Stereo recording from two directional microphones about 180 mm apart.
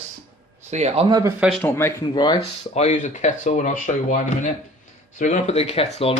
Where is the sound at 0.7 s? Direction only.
40° right (ahead or behind).